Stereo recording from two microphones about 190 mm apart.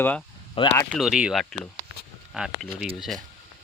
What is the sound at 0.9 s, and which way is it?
Speech, 5° right (ahead or behind).